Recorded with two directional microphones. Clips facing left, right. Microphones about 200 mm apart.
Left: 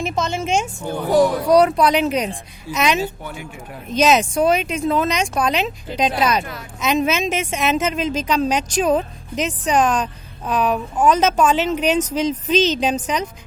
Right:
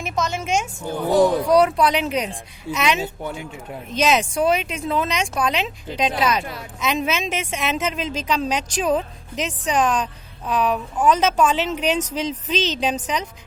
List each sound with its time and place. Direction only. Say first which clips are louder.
0.0 s speech: left 3 dB; 30° left (ahead or behind)
3.0 s speech: left 1 dB; 25° right (ahead or behind)
3.9 s a woman's voice: left 4 dB; 40° left (ahead or behind)